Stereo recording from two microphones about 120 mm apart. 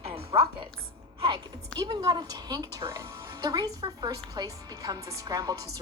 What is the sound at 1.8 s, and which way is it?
A woman's voice, 35° right (ahead or behind).